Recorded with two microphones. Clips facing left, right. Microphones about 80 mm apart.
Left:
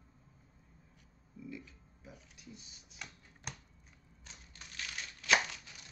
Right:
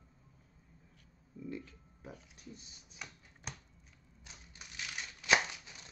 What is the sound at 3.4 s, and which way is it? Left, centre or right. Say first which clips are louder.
Finger snapping: even; centre.